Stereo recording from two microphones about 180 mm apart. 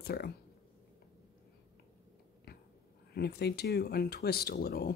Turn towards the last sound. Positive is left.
turn(degrees=55)  # may be behind; listen again after turning